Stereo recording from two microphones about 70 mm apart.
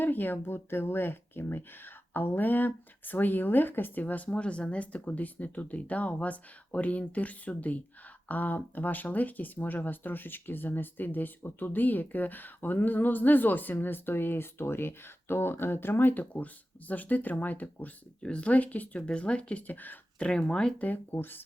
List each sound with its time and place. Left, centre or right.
0.0 s speech: left
20.2 s speech: centre
20.7 s speech: left